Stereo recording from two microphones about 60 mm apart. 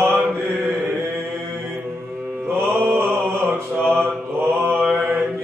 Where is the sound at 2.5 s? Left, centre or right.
Right.